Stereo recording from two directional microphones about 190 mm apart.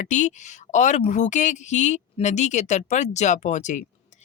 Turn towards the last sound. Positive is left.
turn(degrees=40)  # may be behind; listen again after turning